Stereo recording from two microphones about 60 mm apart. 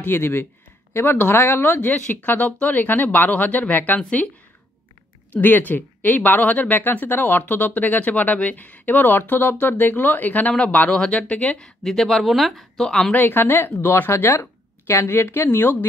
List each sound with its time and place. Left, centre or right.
0.0 s speech: left
2.0 s speech: left
5.3 s speech: left
11.6 s speech: centre
13.1 s speech: left
14.1 s speech: left